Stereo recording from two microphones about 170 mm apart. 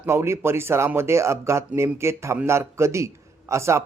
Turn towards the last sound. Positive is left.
turn(degrees=-15)  # may be behind; listen again after turning